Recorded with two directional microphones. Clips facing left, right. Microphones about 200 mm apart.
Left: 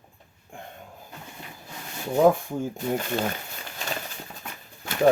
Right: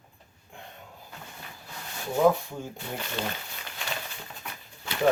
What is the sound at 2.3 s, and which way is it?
Speech, 45° left (ahead or behind).